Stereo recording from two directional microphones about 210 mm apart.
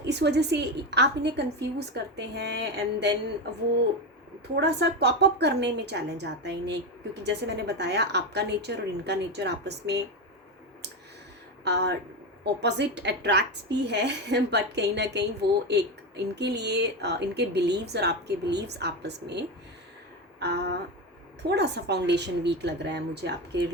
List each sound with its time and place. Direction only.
0.0 s a woman's voice: 55° right (ahead or behind)
4.5 s a woman's voice: 50° right (ahead or behind)
11.6 s a woman's voice: 50° right (ahead or behind)